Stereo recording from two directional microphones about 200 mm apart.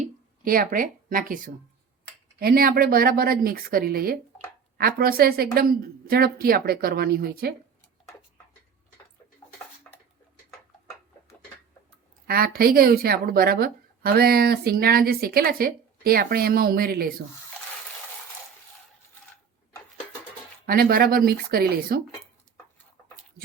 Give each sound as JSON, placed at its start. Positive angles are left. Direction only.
{"t": 0.0, "sound": "speech", "side_deg": -45}
{"t": 12.3, "sound": "speech", "side_deg": -50}
{"t": 20.7, "sound": "speech", "side_deg": -50}